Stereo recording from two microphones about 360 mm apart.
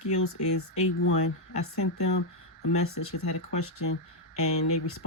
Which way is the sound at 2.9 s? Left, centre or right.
Left.